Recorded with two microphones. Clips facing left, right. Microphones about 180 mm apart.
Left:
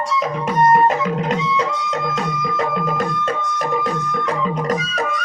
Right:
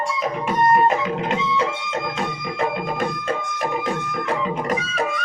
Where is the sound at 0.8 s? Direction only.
40° left (ahead or behind).